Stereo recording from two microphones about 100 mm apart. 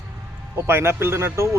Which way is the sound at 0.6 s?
25° right (ahead or behind).